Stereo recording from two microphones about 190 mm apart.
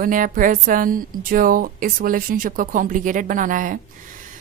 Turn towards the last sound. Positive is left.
turn(degrees=-45)  # may be behind; listen again after turning